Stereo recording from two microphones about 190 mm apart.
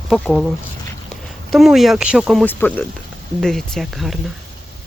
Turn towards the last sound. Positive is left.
turn(degrees=0)  # may be behind; listen again after turning